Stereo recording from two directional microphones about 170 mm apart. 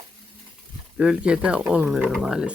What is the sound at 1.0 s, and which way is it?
Speech, 5° right (ahead or behind).